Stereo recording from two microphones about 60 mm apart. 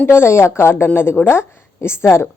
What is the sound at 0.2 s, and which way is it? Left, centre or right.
A woman's voice, left.